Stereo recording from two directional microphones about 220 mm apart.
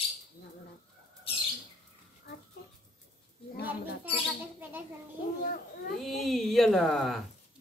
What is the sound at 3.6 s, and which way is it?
Speech, 45° left (ahead or behind).